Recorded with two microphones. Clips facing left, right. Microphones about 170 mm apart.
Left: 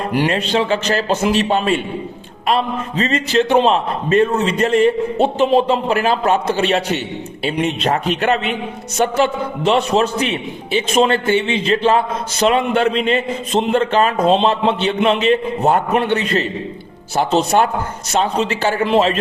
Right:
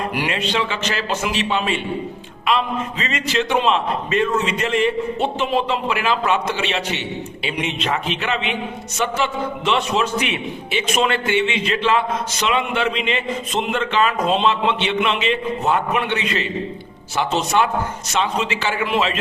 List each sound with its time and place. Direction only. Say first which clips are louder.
0.1 s a man's voice: left 5 dB; 35° left (ahead or behind)